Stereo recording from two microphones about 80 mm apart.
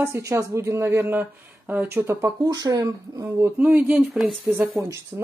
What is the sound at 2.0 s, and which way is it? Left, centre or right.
Speech, right.